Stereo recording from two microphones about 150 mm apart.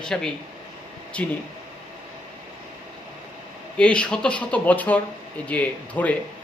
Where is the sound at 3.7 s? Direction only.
5° left (ahead or behind).